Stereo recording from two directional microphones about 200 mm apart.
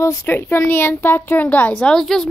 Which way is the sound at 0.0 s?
15° left (ahead or behind).